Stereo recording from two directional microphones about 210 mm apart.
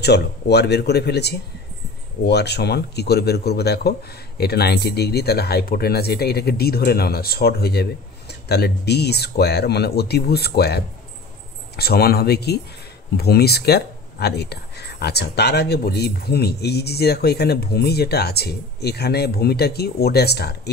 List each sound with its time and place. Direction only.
0.0 s speech: 50° left (ahead or behind)